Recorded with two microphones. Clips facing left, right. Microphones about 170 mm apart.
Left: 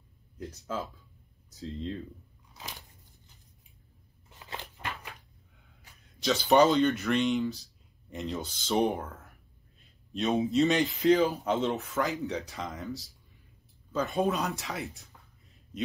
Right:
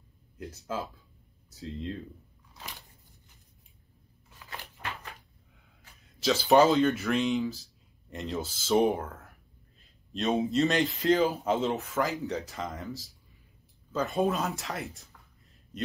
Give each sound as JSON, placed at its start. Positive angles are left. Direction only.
{"t": 1.6, "sound": "speech", "side_deg": 0}
{"t": 4.4, "sound": "a sound", "side_deg": 20}
{"t": 5.9, "sound": "speech", "side_deg": 0}